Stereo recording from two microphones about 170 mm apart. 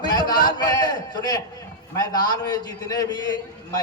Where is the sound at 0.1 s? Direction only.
25° left (ahead or behind).